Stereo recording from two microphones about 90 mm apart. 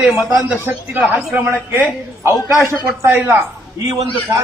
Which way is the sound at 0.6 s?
20° right (ahead or behind).